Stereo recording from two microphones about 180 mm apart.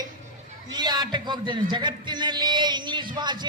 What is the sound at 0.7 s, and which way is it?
A man's voice, 20° right (ahead or behind).